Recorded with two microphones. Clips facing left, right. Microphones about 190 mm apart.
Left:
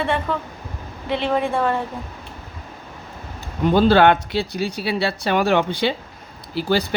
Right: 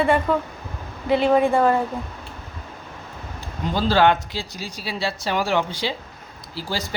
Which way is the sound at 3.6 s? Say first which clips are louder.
Left 5 dB; 55° left (ahead or behind).